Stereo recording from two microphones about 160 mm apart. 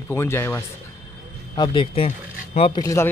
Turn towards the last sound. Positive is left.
turn(degrees=20)  # may be behind; listen again after turning